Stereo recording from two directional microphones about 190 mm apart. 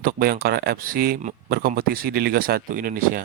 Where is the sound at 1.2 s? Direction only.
40° right (ahead or behind).